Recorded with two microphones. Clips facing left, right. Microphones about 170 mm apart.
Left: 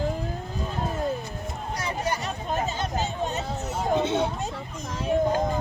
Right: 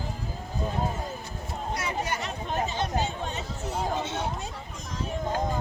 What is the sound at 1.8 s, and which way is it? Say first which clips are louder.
Chatter: left 5 dB; 35° left (ahead or behind).